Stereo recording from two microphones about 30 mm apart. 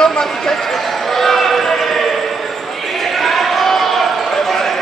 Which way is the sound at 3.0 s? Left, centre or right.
Centre.